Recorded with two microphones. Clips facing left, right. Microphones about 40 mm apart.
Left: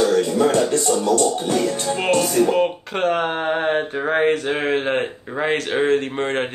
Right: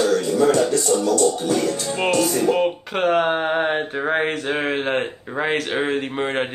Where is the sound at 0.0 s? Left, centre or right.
Left.